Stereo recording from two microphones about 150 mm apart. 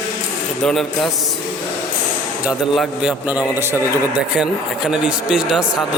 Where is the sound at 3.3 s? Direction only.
10° right (ahead or behind).